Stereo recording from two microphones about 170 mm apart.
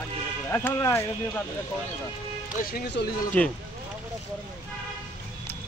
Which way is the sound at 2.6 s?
60° left (ahead or behind).